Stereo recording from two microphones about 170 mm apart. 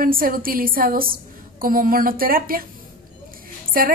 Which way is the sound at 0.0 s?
55° right (ahead or behind).